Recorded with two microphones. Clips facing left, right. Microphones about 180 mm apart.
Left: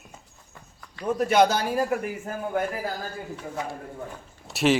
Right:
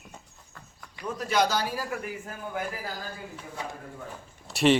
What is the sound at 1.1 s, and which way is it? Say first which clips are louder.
A man's voice: left 5 dB; 55° left (ahead or behind).